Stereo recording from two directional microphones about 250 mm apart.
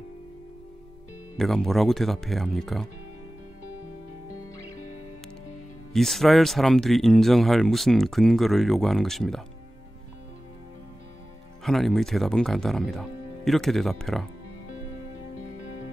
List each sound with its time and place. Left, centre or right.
1.4 s speech: centre
4.3 s music: left
5.9 s speech: centre
11.6 s speech: centre